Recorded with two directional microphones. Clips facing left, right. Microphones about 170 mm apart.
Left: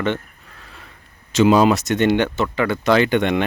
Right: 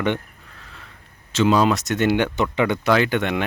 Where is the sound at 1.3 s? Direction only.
10° left (ahead or behind); by 2.9 s 20° right (ahead or behind).